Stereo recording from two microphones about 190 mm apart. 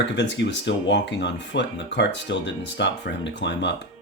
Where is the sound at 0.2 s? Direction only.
65° left (ahead or behind).